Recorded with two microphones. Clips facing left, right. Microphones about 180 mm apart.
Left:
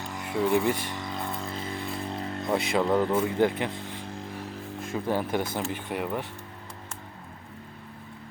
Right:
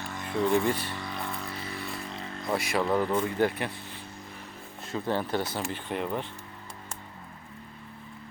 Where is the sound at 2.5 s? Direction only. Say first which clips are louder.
Left 2 dB; 20° left (ahead or behind).